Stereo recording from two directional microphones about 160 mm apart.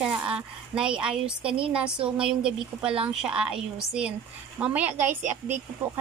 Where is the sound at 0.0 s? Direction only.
5° right (ahead or behind).